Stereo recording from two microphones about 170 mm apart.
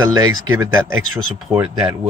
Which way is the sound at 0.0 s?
20° right (ahead or behind).